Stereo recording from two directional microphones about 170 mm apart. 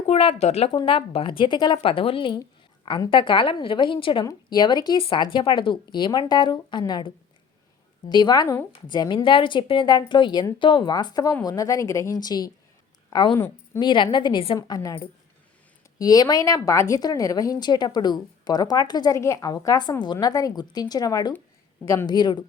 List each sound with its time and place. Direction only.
0.1 s speech: 35° left (ahead or behind)
0.7 s a woman's voice: 30° left (ahead or behind)
8.1 s a woman's voice: 25° left (ahead or behind)